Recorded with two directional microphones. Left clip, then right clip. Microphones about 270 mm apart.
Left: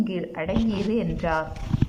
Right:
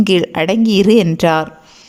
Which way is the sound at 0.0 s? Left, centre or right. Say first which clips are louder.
Right 15 dB; right.